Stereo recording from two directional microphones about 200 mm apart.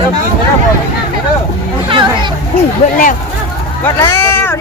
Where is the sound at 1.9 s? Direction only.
25° right (ahead or behind).